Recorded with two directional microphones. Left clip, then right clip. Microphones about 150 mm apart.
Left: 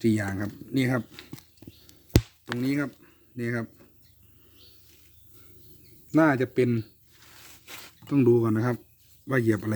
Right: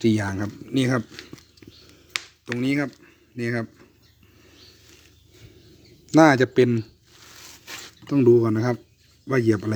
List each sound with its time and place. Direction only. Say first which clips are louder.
0.0 s speech: right 4 dB; 5° left (ahead or behind)
2.6 s speech: right 4 dB; 5° right (ahead or behind)
6.1 s a man's voice: right 7 dB; 15° right (ahead or behind)
8.1 s speech: right 5 dB; 15° left (ahead or behind)